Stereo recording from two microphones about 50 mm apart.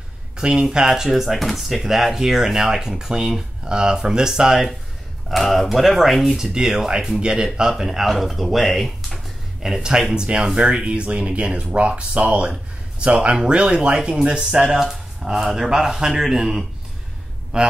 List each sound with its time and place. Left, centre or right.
0.4 s speech: centre
6.3 s speech: centre
7.7 s speech: centre
9.6 s speech: centre
17.5 s speech: centre